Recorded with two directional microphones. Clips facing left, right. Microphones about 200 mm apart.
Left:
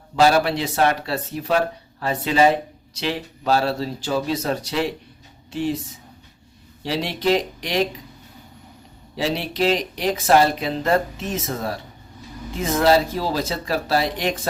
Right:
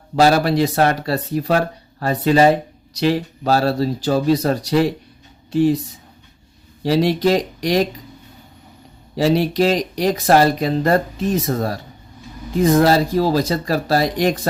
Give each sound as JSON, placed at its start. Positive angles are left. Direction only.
{"t": 0.2, "sound": "speech", "side_deg": -40}
{"t": 6.8, "sound": "speech", "side_deg": -40}
{"t": 9.1, "sound": "speech", "side_deg": -40}